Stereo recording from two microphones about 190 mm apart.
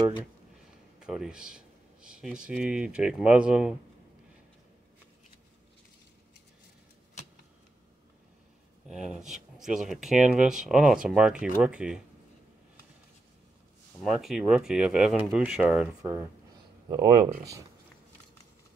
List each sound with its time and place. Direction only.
0.9 s a sound: 5° right (ahead or behind)
2.4 s speech: 5° right (ahead or behind)
8.8 s speech: 5° right (ahead or behind)
14.0 s speech: centre (ahead or behind)
16.9 s speech: 20° right (ahead or behind)